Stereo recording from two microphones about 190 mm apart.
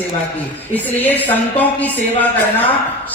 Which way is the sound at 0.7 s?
10° left (ahead or behind).